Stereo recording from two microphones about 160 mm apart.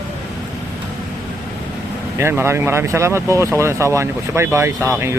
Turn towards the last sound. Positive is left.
turn(degrees=-15)  # may be behind; listen again after turning